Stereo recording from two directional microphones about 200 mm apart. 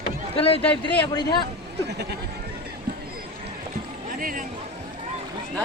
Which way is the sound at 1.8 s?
55° right (ahead or behind).